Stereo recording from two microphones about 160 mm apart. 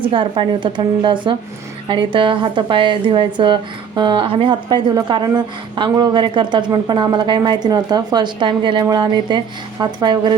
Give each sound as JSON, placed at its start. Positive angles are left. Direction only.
{"t": 0.1, "sound": "a woman's voice", "side_deg": -30}